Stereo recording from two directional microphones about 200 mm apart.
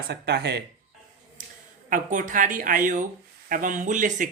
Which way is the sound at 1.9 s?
40° right (ahead or behind).